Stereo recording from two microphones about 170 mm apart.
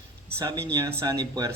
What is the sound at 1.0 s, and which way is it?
Speech, 20° right (ahead or behind).